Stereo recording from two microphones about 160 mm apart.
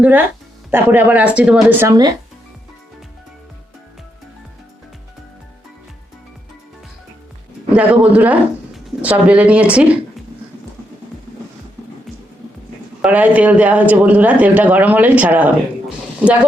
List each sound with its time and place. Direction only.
0.0 s speech: 10° right (ahead or behind)
1.9 s speech: 25° right (ahead or behind)
7.7 s speech: 10° right (ahead or behind)
13.0 s speech: 10° right (ahead or behind)